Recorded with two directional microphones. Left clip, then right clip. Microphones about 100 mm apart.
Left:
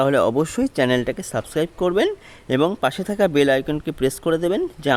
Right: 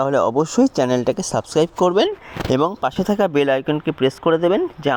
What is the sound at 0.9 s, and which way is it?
Speech, 35° right (ahead or behind).